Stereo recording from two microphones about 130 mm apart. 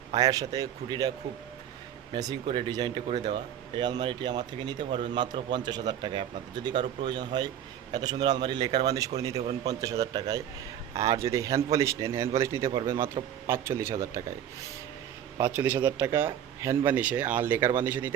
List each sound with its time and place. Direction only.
0.2 s a man's voice: 25° right (ahead or behind)
2.1 s a man's voice: 35° right (ahead or behind)
15.4 s speech: 15° right (ahead or behind)